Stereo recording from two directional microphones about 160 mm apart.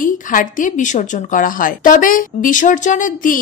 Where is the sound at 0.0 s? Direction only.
55° left (ahead or behind).